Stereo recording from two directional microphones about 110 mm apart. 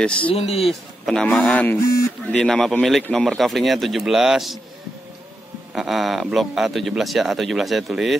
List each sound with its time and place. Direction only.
0.2 s speech: 60° left (ahead or behind)
0.7 s a man's voice: 5° left (ahead or behind)
5.8 s a man's voice: centre (ahead or behind)